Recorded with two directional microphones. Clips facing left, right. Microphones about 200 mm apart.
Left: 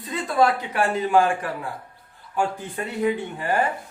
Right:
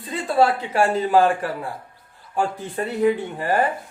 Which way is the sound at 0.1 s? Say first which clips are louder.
Right 2 dB; 30° right (ahead or behind).